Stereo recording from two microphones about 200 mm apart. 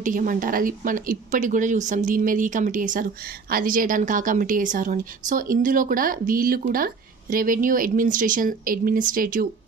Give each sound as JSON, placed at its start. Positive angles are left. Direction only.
{"t": 0.0, "sound": "speech", "side_deg": -40}